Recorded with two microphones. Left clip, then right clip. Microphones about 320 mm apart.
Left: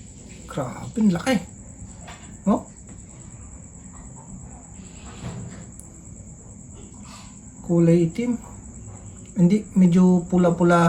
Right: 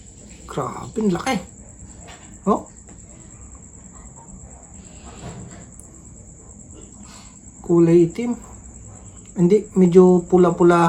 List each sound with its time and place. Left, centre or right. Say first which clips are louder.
0.5 s speech: right 4 dB; centre
7.8 s speech: right 5 dB; centre
9.3 s speech: right 6 dB; centre